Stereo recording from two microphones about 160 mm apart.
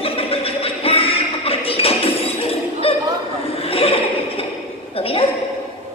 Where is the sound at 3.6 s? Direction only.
35° left (ahead or behind).